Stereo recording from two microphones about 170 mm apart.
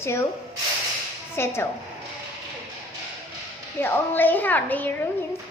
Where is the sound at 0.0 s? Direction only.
15° left (ahead or behind).